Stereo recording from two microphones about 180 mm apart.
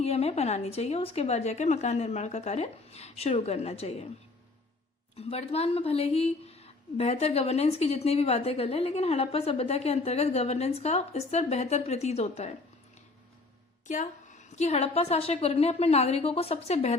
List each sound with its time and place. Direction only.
0.0 s a woman's voice: 35° left (ahead or behind)
5.1 s a woman's voice: 35° left (ahead or behind)
13.8 s a woman's voice: 45° left (ahead or behind)